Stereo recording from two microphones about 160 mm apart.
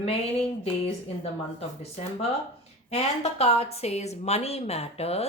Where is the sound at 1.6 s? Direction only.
40° left (ahead or behind).